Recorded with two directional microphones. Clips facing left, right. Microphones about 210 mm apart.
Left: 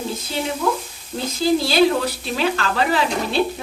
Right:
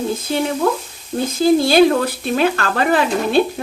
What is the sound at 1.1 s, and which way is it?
A woman's voice, 50° right (ahead or behind).